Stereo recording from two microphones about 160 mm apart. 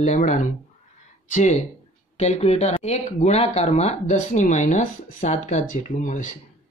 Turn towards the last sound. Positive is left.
turn(degrees=55)  # may be behind; listen again after turning